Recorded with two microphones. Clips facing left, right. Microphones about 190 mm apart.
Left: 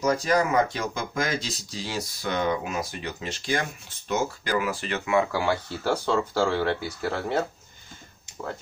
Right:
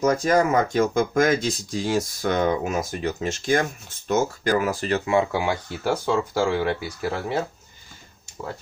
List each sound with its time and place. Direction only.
0.0 s speech: 50° right (ahead or behind); by 5.4 s 30° right (ahead or behind)
5.4 s speech: 15° right (ahead or behind)